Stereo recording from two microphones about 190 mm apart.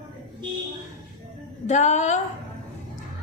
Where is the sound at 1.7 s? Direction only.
40° left (ahead or behind).